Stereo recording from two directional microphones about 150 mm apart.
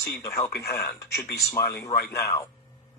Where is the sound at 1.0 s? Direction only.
90° left.